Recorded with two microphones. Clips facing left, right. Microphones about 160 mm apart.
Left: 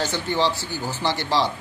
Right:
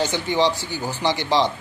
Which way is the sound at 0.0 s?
15° right (ahead or behind).